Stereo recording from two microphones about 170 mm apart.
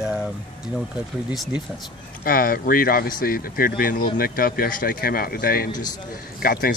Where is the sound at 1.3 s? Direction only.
Centre (ahead or behind).